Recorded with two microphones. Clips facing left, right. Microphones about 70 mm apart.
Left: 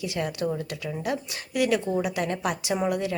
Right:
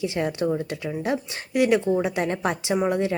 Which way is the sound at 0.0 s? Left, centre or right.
Right.